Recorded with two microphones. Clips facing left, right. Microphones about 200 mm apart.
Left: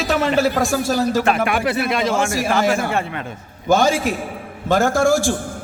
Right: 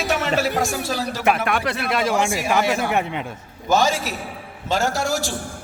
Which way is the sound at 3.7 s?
50° left (ahead or behind).